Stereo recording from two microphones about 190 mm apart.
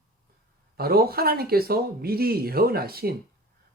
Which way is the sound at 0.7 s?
55° right (ahead or behind).